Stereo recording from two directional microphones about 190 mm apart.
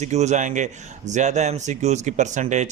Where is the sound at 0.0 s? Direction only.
35° right (ahead or behind).